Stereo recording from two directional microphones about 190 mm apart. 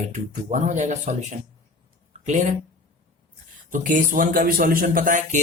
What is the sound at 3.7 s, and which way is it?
A man's voice, 45° right (ahead or behind).